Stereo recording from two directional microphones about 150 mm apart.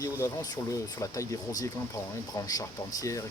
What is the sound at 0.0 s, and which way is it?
Speech, 25° left (ahead or behind).